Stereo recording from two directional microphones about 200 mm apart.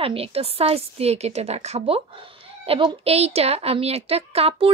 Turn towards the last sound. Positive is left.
turn(degrees=-30)  # may be behind; listen again after turning